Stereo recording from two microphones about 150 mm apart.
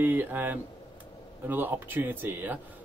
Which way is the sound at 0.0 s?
10° right (ahead or behind).